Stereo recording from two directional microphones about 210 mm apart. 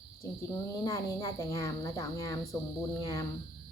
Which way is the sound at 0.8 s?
15° left (ahead or behind).